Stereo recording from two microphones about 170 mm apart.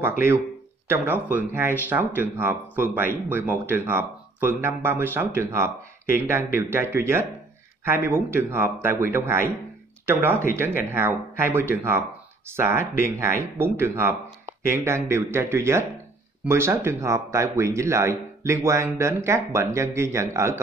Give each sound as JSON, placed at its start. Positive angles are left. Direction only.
{"t": 0.8, "sound": "speech", "side_deg": -15}
{"t": 10.5, "sound": "speech", "side_deg": -15}